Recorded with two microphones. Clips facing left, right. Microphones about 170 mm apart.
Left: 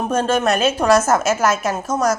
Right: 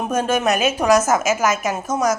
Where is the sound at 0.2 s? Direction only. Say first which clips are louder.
Left 1 dB; 10° right (ahead or behind).